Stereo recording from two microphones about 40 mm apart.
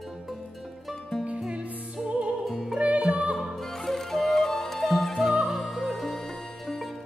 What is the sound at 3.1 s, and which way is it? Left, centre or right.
Music, right.